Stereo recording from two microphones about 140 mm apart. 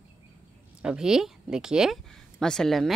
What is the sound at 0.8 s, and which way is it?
Speech, 5° right (ahead or behind).